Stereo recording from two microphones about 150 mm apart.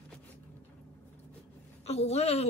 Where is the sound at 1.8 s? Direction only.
45° left (ahead or behind).